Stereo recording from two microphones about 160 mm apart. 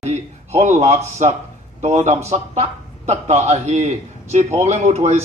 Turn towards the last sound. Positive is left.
turn(degrees=-45)  # may be behind; listen again after turning